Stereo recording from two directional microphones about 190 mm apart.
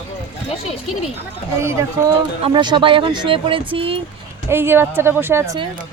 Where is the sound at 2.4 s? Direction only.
25° right (ahead or behind).